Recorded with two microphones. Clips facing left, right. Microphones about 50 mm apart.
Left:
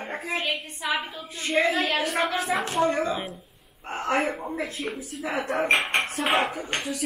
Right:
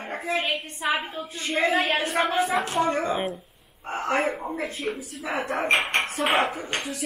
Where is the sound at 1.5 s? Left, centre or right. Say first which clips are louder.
Even; centre.